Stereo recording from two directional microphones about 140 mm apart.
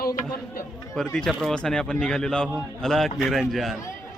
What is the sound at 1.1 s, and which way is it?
A man's voice, 5° left (ahead or behind).